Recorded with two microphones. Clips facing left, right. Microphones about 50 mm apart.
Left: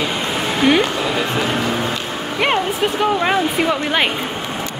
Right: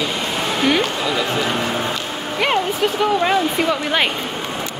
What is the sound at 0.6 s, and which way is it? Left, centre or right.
Music, centre.